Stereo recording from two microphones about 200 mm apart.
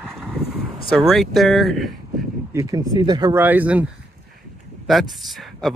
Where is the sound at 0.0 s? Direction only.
Centre (ahead or behind).